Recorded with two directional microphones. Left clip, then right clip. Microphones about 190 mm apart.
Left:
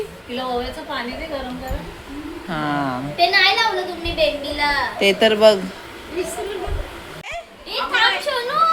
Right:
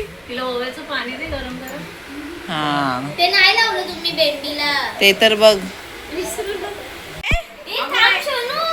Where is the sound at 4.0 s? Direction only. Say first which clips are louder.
Right 2 dB; 20° left (ahead or behind).